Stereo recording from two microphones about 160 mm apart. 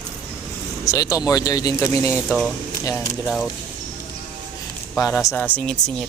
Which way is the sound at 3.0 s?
20° left (ahead or behind).